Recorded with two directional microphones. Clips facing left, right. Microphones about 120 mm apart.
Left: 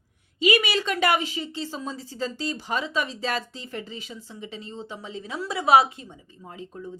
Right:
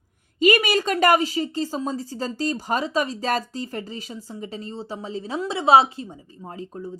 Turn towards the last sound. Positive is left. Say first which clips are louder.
# right 4 dB
turn(degrees=-35)  # may be behind; listen again after turning